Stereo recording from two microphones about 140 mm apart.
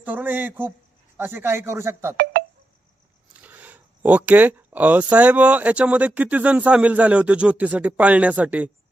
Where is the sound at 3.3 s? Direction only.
10° right (ahead or behind).